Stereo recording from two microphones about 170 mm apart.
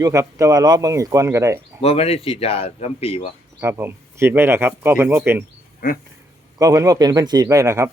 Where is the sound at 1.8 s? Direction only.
35° left (ahead or behind).